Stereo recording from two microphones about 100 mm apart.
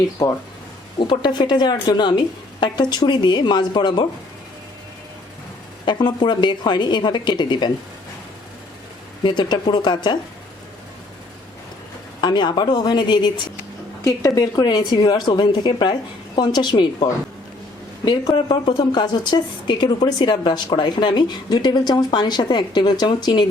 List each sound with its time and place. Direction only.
0.2 s speech: 35° left (ahead or behind)
0.9 s speech: 50° left (ahead or behind)
5.8 s speech: 50° left (ahead or behind)
9.2 s speech: 50° left (ahead or behind)
12.2 s speech: 45° left (ahead or behind)
14.0 s speech: 35° left (ahead or behind)
18.3 s speech: 65° left (ahead or behind)
18.5 s speech: 45° left (ahead or behind)